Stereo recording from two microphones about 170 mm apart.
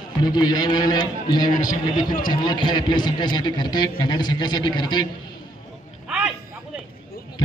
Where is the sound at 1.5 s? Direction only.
50° left (ahead or behind).